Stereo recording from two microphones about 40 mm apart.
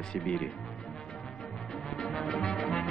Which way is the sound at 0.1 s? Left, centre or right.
Left.